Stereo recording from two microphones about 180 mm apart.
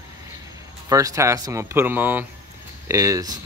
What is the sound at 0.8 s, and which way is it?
Speech, 15° right (ahead or behind).